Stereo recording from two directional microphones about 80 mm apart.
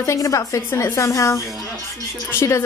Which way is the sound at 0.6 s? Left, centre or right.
Left.